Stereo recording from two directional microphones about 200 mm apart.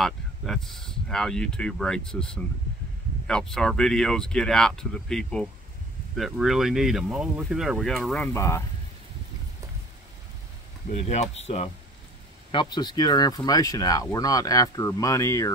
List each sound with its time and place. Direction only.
0.0 s speech: centre (ahead or behind)
10.9 s speech: 35° left (ahead or behind)
12.4 s speech: 25° left (ahead or behind)